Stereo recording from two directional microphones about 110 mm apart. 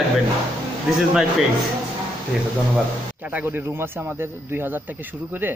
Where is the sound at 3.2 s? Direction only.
15° right (ahead or behind).